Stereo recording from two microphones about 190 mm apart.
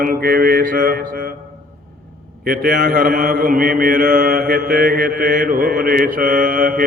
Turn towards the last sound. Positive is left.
turn(degrees=-50)  # may be behind; listen again after turning